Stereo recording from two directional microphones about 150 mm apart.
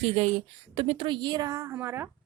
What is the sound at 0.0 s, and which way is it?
A woman's voice, 45° right (ahead or behind).